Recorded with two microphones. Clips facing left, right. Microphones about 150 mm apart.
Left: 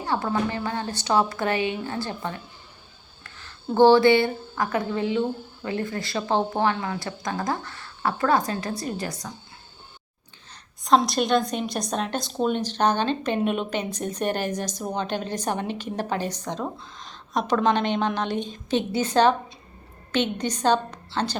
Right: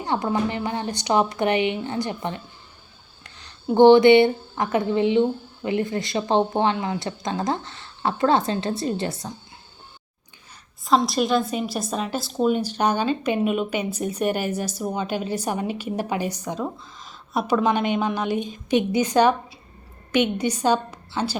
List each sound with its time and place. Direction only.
0.0 s speech: 20° right (ahead or behind)
10.8 s a woman's voice: centre (ahead or behind)